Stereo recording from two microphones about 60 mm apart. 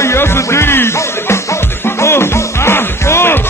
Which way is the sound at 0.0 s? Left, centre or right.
Left.